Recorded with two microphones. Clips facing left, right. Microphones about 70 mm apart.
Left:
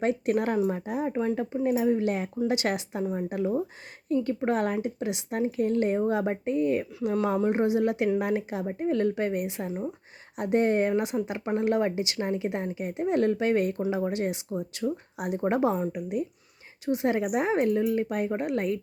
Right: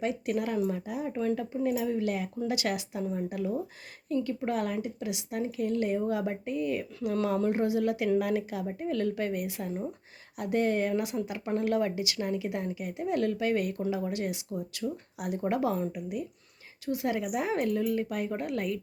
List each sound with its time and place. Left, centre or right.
0.0 s a woman's voice: left
7.1 s a woman's voice: centre
9.6 s speech: centre
10.3 s a woman's voice: left